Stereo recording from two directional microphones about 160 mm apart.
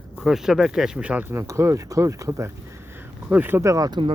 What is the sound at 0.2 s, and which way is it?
Speech, centre (ahead or behind).